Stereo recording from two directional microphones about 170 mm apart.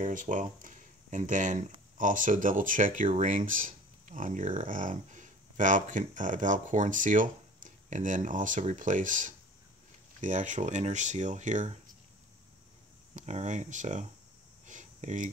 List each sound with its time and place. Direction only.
0.0 s speech: 50° right (ahead or behind)
13.1 s speech: 45° right (ahead or behind)
14.7 s a sound: 45° right (ahead or behind)